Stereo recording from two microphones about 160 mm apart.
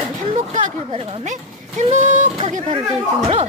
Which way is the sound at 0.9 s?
40° right (ahead or behind).